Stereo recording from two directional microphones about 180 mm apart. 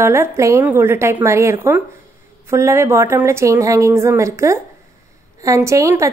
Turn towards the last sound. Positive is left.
turn(degrees=-15)  # may be behind; listen again after turning